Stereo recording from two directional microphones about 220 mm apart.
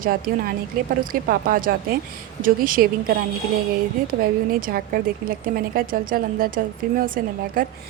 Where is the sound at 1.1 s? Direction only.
40° right (ahead or behind).